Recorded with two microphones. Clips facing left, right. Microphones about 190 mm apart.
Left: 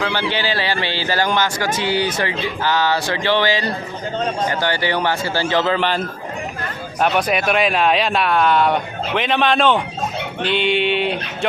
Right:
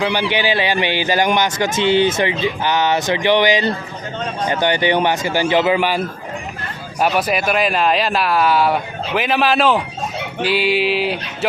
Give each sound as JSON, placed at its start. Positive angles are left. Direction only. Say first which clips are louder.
{"t": 0.0, "sound": "a man's voice", "louder": "right 3 dB", "side_deg": -15}
{"t": 7.0, "sound": "speech", "louder": "even", "side_deg": -5}